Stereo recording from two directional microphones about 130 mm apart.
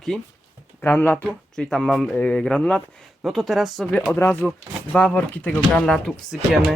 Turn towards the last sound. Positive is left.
turn(degrees=0)  # may be behind; listen again after turning